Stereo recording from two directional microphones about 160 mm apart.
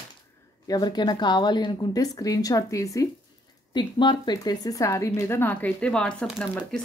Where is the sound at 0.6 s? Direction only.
25° left (ahead or behind).